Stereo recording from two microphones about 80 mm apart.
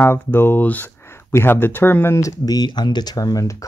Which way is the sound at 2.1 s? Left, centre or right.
Left.